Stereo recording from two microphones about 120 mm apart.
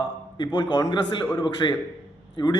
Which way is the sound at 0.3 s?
40° left (ahead or behind).